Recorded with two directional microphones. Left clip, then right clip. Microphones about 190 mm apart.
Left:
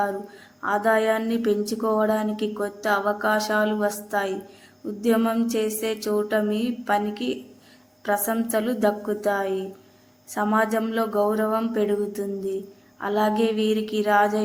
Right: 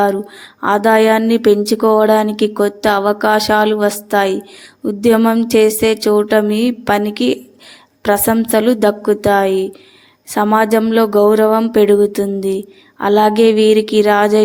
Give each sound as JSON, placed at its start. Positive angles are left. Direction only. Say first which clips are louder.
{"t": 0.6, "sound": "speech", "louder": "right 10 dB", "side_deg": -40}